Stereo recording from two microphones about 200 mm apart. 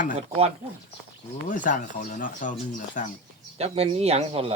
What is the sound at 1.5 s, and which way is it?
Speech, 40° left (ahead or behind).